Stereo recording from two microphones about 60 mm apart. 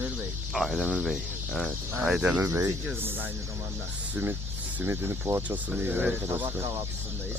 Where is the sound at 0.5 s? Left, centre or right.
Centre.